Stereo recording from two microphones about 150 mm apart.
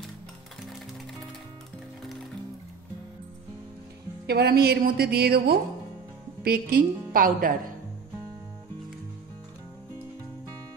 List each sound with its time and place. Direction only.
4.3 s a woman's voice: 90° right; by 7.7 s 70° right (ahead or behind)